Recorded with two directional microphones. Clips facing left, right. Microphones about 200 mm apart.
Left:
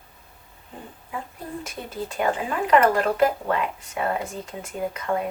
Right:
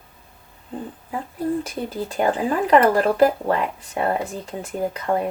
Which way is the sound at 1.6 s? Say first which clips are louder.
Right 5 dB; 35° right (ahead or behind).